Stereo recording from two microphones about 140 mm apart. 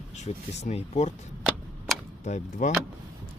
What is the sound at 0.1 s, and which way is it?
Speech, 55° left (ahead or behind).